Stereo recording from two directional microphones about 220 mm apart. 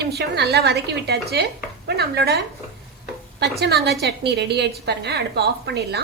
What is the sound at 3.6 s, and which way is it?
A woman's voice, 50° right (ahead or behind).